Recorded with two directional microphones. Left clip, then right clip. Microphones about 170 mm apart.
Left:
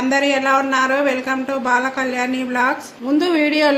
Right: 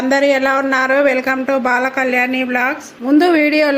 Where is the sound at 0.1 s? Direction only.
30° right (ahead or behind).